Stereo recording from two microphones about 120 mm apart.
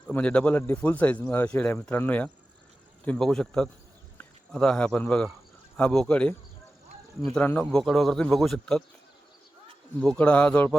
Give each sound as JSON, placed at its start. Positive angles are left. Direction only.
{"t": 0.1, "sound": "a man's voice", "side_deg": 10}
{"t": 7.3, "sound": "a man's voice", "side_deg": 15}
{"t": 10.1, "sound": "speech", "side_deg": 10}